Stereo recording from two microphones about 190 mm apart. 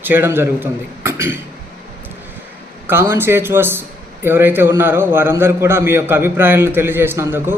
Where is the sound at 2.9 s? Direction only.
10° right (ahead or behind).